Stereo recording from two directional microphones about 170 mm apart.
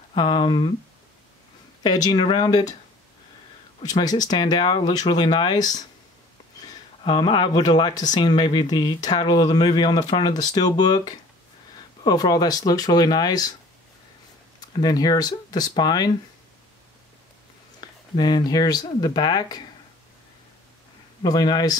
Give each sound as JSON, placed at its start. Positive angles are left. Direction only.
{"t": 0.1, "sound": "speech", "side_deg": 30}
{"t": 1.8, "sound": "speech", "side_deg": 25}
{"t": 3.8, "sound": "speech", "side_deg": 20}
{"t": 14.6, "sound": "speech", "side_deg": 25}
{"t": 17.7, "sound": "speech", "side_deg": 25}
{"t": 21.2, "sound": "speech", "side_deg": 25}